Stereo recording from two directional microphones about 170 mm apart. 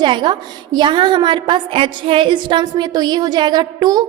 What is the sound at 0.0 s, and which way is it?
A woman's voice, 25° right (ahead or behind).